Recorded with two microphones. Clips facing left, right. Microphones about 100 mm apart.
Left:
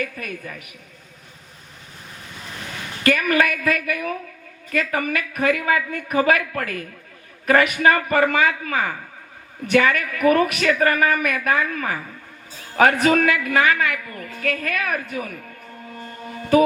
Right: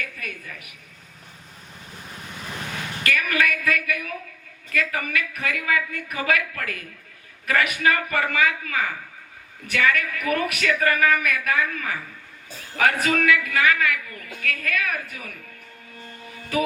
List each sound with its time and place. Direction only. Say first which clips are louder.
0.0 s a woman's voice: left 6 dB; 35° left (ahead or behind)
3.0 s a woman's voice: left 5 dB; 35° left (ahead or behind)
15.9 s music: left 7 dB; 40° left (ahead or behind)